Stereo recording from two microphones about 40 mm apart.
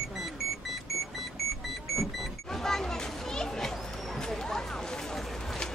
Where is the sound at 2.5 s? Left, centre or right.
Centre.